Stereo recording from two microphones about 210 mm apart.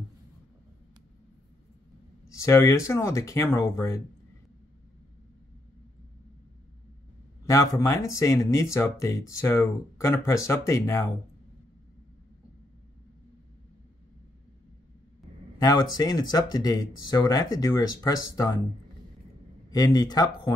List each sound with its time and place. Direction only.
2.2 s speech: 15° left (ahead or behind)
7.4 s speech: 15° left (ahead or behind)
15.6 s speech: 20° left (ahead or behind)
19.7 s speech: 15° left (ahead or behind)